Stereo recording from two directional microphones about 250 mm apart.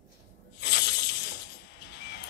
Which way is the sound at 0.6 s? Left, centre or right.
Left.